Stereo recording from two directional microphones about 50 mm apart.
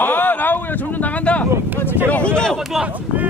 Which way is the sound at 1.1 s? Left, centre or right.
Left.